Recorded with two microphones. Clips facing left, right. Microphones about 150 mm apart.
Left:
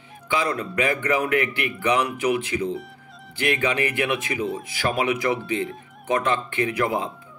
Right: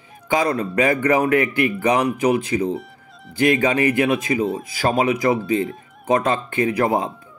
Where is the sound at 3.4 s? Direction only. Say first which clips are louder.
Right 6 dB; 35° right (ahead or behind).